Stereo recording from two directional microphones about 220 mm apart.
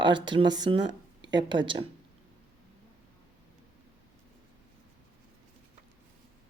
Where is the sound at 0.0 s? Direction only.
20° right (ahead or behind).